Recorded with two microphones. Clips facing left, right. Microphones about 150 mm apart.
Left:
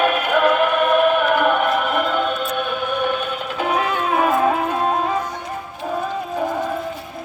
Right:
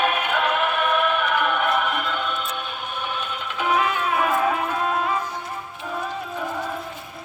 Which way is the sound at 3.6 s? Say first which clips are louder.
Left 1 dB; 40° left (ahead or behind).